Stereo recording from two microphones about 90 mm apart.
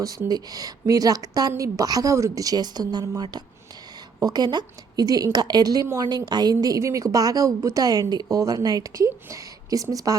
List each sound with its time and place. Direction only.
0.3 s a woman's voice: 45° right (ahead or behind)